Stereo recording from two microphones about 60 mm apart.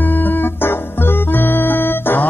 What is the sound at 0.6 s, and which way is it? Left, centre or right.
Music, left.